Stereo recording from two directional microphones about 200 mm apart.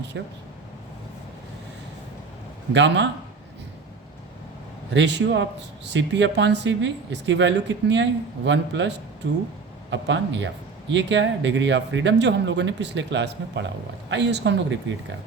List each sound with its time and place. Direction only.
0.1 s speech: 65° right (ahead or behind)
2.7 s speech: 60° right (ahead or behind)
4.9 s speech: 60° right (ahead or behind)